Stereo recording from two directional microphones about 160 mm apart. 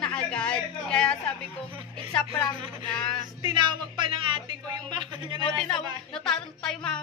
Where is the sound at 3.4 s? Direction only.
30° right (ahead or behind).